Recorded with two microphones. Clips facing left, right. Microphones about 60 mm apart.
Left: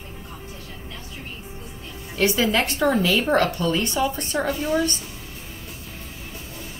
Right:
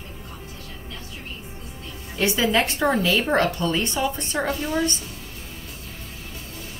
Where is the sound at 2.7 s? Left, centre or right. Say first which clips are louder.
Left 1 dB; right.